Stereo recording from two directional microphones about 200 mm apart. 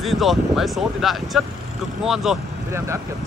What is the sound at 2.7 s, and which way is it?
Speech, 15° right (ahead or behind).